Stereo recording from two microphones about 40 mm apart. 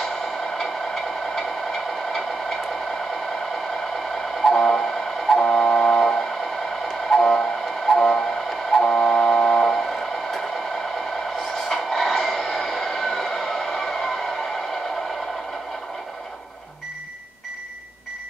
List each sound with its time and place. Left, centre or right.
0.6 s a sound: centre
4.4 s train: centre
5.4 s vehicle: centre
6.9 s train: centre
7.9 s vehicle: centre
11.7 s a sound: centre